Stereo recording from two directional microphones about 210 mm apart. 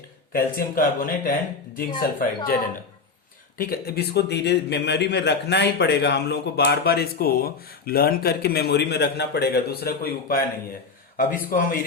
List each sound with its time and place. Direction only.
0.3 s a man's voice: 40° left (ahead or behind)
3.6 s a man's voice: 45° left (ahead or behind)